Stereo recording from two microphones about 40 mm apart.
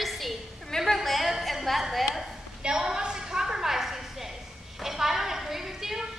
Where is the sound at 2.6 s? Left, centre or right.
Centre.